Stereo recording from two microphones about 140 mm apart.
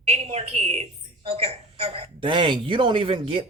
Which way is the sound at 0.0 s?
50° right (ahead or behind).